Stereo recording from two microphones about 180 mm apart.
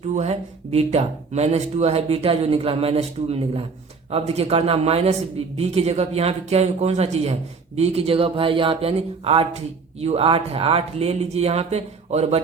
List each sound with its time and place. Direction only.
0.1 s speech: 35° right (ahead or behind)